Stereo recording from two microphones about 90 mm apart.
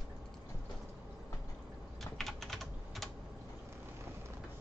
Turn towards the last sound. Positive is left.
turn(degrees=0)  # may be behind; listen again after turning